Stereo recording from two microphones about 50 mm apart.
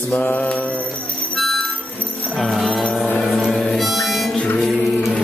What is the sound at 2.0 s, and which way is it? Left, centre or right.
Music, left.